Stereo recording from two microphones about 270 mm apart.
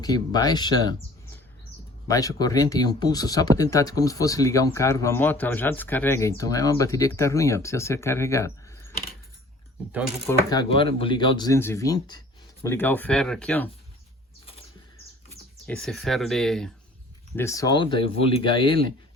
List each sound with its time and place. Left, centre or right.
0.0 s speech: centre
2.0 s speech: centre
10.2 s speech: centre
15.6 s speech: centre